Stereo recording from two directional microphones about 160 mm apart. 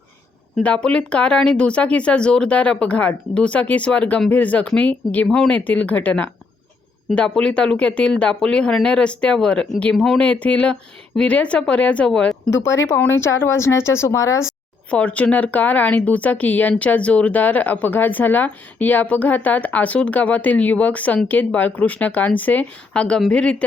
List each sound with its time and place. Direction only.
0.5 s speech: 5° left (ahead or behind)
12.5 s speech: 15° left (ahead or behind)
14.8 s speech: 10° left (ahead or behind)